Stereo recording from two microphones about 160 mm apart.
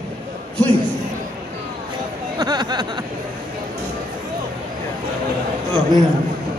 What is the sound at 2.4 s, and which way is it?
Speech, 25° right (ahead or behind).